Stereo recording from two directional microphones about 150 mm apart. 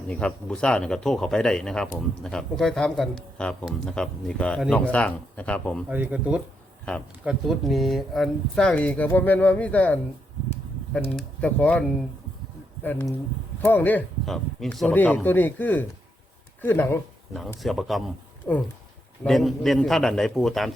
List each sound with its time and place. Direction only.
0.1 s speech: 5° left (ahead or behind)
5.9 s speech: 10° right (ahead or behind); by 10.0 s 10° left (ahead or behind)
11.2 s speech: 10° left (ahead or behind)
17.6 s speech: centre (ahead or behind)
18.5 s speech: 10° left (ahead or behind)
19.2 s speech: centre (ahead or behind)